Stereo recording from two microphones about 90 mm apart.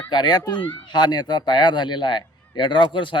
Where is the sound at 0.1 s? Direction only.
55° left (ahead or behind).